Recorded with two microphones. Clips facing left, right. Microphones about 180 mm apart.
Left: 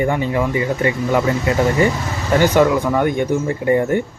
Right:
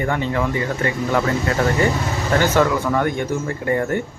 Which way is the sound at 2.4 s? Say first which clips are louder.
Left 5 dB; 15° left (ahead or behind).